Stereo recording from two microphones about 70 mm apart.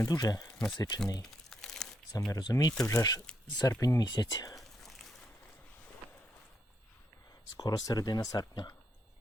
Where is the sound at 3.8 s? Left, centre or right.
Left.